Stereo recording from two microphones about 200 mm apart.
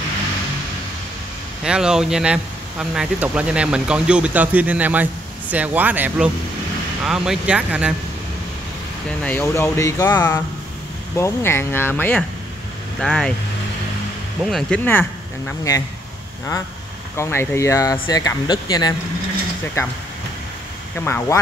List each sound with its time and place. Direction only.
1.6 s speech: 5° right (ahead or behind)
9.2 s speech: 10° left (ahead or behind)
14.4 s speech: 5° left (ahead or behind)
17.2 s speech: 15° left (ahead or behind)
21.0 s speech: 10° left (ahead or behind)